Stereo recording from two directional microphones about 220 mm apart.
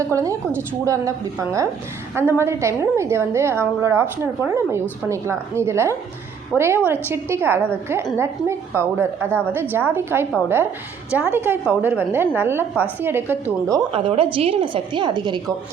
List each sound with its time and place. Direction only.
0.1 s a woman's voice: 15° right (ahead or behind)
13.7 s a woman's voice: 20° right (ahead or behind)